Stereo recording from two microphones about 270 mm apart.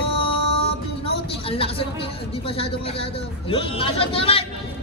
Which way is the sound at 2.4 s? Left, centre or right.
Left.